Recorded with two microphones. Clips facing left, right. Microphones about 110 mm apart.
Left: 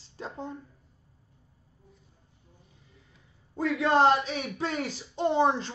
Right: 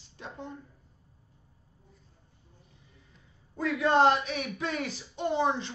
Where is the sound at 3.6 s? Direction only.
25° left (ahead or behind).